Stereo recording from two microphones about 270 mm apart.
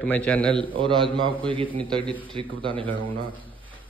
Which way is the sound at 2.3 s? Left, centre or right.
Centre.